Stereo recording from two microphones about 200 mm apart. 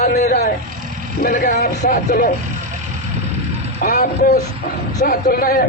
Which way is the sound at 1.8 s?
50° left (ahead or behind).